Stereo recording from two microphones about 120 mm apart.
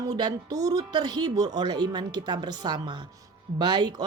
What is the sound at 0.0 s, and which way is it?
Speech, 35° right (ahead or behind).